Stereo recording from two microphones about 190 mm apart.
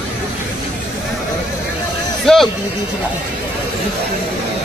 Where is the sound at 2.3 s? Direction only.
5° left (ahead or behind).